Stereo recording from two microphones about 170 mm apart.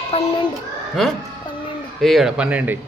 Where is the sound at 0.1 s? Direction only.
35° left (ahead or behind).